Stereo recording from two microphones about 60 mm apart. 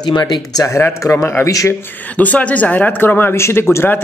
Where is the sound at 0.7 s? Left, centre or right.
Left.